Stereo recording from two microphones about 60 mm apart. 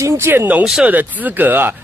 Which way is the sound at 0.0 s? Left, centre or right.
Right.